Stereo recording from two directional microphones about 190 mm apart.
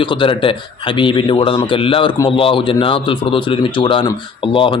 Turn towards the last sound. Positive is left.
turn(degrees=25)  # may be behind; listen again after turning